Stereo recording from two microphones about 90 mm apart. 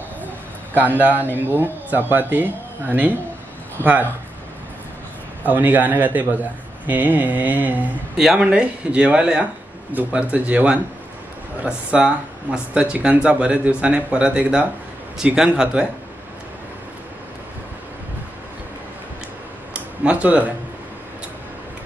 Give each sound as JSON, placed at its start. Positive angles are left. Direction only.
{"t": 0.7, "sound": "speech", "side_deg": -20}
{"t": 5.5, "sound": "speech", "side_deg": -20}
{"t": 8.2, "sound": "speech", "side_deg": -5}
{"t": 19.7, "sound": "a sound", "side_deg": -15}